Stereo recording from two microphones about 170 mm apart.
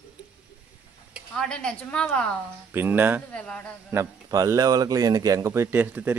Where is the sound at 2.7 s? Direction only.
10° right (ahead or behind).